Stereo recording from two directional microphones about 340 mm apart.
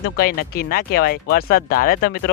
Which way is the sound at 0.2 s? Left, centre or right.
Left.